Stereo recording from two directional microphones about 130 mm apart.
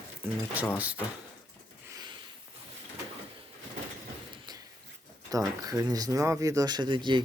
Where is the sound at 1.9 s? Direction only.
30° right (ahead or behind).